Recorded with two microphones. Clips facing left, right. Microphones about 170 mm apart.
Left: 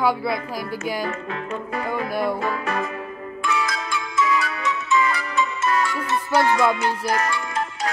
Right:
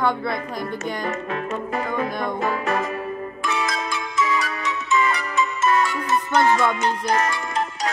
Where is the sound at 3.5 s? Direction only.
20° right (ahead or behind).